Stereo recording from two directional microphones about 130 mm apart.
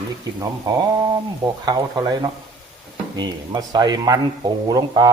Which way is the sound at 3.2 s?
35° right (ahead or behind).